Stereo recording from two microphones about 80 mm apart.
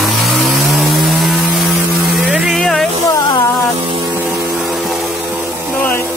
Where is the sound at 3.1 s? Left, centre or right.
Left.